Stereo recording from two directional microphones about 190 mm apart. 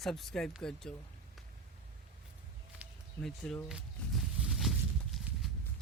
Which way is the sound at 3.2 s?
5° left (ahead or behind).